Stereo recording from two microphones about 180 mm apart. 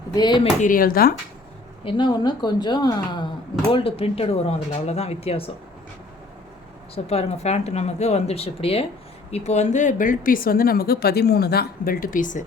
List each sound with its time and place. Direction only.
0.1 s a woman's voice: 25° left (ahead or behind)
0.6 s speech: 50° left (ahead or behind)
1.8 s a woman's voice: 30° left (ahead or behind)
6.9 s speech: 35° left (ahead or behind)